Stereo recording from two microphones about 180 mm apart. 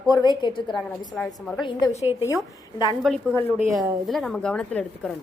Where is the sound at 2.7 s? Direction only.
25° left (ahead or behind).